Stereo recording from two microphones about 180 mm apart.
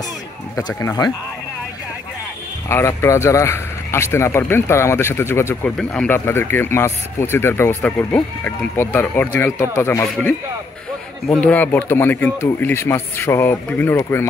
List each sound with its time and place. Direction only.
0.6 s speech: 20° left (ahead or behind)
2.7 s speech: 15° left (ahead or behind)